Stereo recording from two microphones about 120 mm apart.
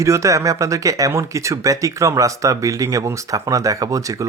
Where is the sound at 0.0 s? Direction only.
25° right (ahead or behind).